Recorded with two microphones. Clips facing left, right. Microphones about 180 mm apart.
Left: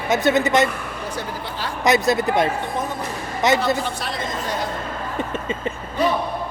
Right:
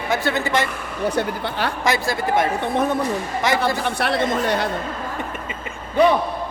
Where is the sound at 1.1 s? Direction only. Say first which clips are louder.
Right 6 dB; 65° right (ahead or behind).